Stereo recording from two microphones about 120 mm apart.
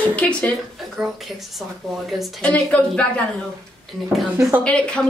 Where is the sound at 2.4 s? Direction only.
10° left (ahead or behind).